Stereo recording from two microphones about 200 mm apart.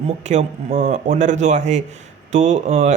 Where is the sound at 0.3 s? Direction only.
35° right (ahead or behind).